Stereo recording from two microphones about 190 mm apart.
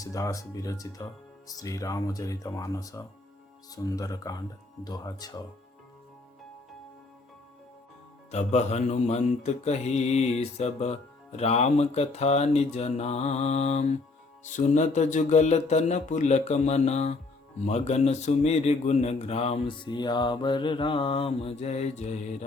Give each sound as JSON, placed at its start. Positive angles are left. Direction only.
{"t": 0.0, "sound": "speech", "side_deg": 15}
{"t": 8.3, "sound": "mantra", "side_deg": 35}